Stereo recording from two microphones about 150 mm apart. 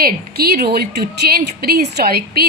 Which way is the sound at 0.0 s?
90° right.